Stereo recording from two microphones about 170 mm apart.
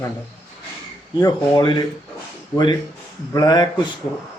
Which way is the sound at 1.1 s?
25° left (ahead or behind).